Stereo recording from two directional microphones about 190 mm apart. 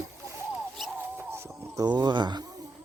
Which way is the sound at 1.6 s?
20° right (ahead or behind).